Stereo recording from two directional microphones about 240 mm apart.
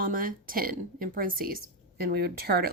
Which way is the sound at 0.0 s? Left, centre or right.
Right.